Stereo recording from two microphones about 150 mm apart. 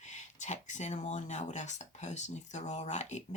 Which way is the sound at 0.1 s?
55° left (ahead or behind).